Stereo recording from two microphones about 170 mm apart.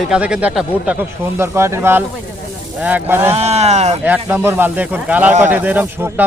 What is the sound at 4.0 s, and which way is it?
Speech, 10° right (ahead or behind).